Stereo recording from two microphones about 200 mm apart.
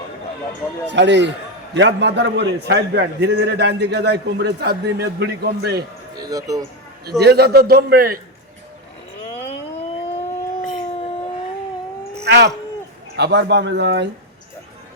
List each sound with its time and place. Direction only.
0.9 s a man's voice: 60° right (ahead or behind)
6.1 s speech: 20° right (ahead or behind)
7.2 s a man's voice: 55° right (ahead or behind)
10.2 s a sound: 35° left (ahead or behind)
12.2 s a man's voice: 55° right (ahead or behind)